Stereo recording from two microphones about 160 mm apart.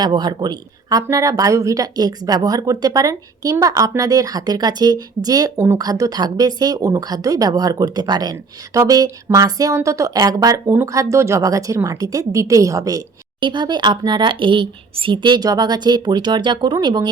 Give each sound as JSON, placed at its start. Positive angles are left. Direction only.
{"t": 0.0, "sound": "speech", "side_deg": -25}